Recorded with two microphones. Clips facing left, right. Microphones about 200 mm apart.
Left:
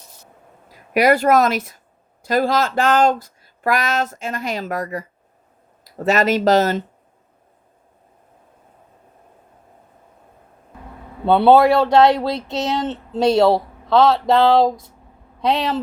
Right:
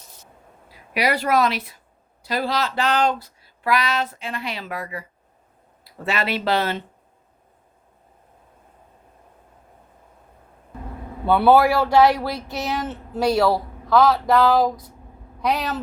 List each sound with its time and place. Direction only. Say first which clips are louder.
0.7 s speech: left 7 dB; 50° left (ahead or behind)
11.3 s speech: left 3 dB; 25° left (ahead or behind)